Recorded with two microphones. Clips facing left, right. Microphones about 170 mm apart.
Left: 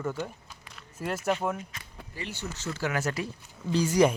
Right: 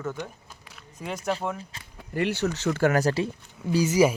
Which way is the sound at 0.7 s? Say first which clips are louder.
Left 2 dB; centre (ahead or behind).